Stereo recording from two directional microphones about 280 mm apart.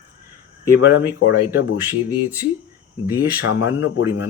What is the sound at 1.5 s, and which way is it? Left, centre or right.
Speech, centre.